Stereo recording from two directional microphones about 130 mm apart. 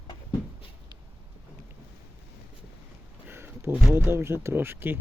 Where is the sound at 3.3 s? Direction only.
20° right (ahead or behind).